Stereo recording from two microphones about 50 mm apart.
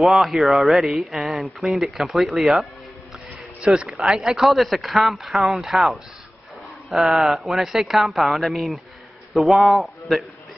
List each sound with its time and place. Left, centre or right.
0.0 s speech: centre
3.6 s speech: centre
3.9 s a man's voice: centre